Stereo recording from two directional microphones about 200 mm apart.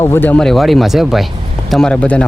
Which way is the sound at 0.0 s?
10° left (ahead or behind).